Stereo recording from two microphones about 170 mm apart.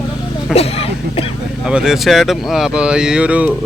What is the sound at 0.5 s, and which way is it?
Speech, 35° left (ahead or behind).